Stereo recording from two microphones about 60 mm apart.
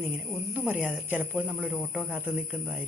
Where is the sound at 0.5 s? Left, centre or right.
Right.